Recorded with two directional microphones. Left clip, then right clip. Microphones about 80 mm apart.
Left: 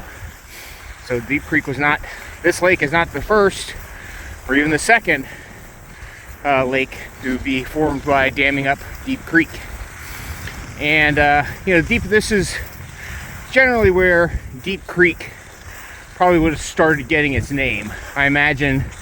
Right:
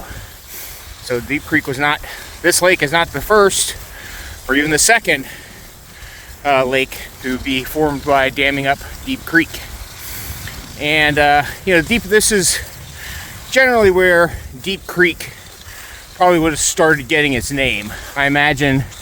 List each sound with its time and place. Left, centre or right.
1.0 s speech: right
6.4 s speech: right
7.8 s speech: right
10.4 s speech: right
17.8 s speech: right
18.5 s speech: right